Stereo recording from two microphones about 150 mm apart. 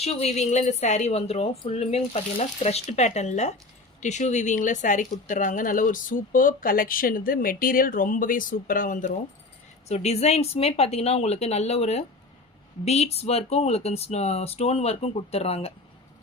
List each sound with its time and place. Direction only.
0.0 s a woman's voice: 45° left (ahead or behind); by 9.1 s 60° left (ahead or behind)
9.9 s a woman's voice: 45° left (ahead or behind)